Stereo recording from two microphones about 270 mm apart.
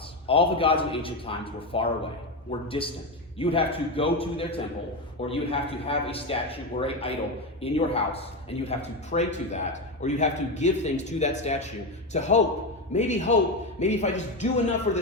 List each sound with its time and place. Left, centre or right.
0.3 s speech: centre